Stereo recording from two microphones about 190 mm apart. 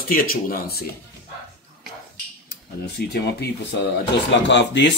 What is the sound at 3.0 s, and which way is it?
Speech, 55° left (ahead or behind).